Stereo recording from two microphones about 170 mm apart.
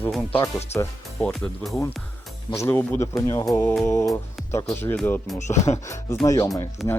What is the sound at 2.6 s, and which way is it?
Speech, 15° left (ahead or behind).